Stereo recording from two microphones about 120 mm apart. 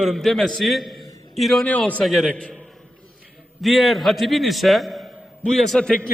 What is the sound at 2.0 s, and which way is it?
Speech, centre (ahead or behind).